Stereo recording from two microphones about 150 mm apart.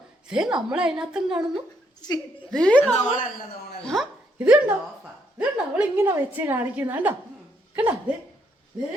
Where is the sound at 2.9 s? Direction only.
50° left (ahead or behind).